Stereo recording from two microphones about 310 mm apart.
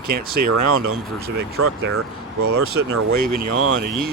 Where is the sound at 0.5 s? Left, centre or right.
Right.